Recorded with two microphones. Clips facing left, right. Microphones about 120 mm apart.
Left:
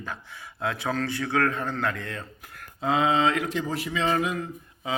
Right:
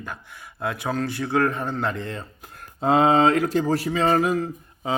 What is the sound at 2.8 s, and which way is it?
Speech, 40° right (ahead or behind).